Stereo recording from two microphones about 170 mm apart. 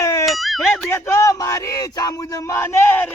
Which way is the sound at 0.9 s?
15° left (ahead or behind).